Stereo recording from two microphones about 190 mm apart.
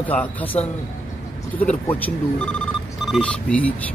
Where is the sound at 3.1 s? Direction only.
5° left (ahead or behind).